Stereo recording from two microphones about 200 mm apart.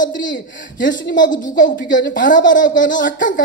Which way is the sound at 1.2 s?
65° left (ahead or behind).